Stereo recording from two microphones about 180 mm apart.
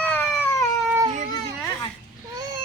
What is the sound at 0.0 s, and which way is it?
Cat, 10° left (ahead or behind).